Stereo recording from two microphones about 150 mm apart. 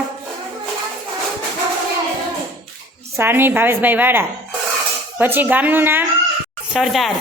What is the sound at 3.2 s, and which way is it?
A woman's voice, 15° right (ahead or behind).